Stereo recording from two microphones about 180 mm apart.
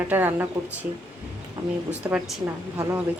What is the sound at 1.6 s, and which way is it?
Speech, 10° right (ahead or behind).